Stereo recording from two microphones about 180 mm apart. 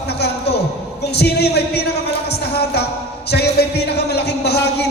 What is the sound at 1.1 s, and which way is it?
Speech, 65° left (ahead or behind).